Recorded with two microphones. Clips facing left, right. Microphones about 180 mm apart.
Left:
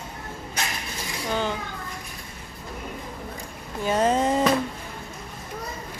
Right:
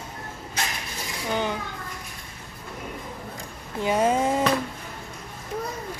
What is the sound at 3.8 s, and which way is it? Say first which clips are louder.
Speech: even; 10° right (ahead or behind).